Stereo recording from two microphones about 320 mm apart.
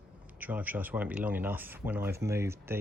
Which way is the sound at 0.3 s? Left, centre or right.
Centre.